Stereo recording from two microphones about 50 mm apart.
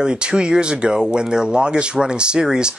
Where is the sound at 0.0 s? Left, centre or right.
Centre.